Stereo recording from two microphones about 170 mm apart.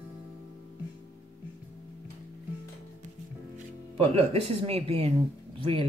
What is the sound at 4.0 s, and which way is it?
Speech, 35° right (ahead or behind).